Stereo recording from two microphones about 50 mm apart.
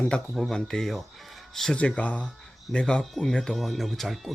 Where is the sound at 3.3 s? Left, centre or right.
Centre.